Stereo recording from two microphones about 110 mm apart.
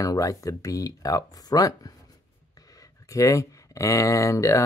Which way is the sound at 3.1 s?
30° left (ahead or behind).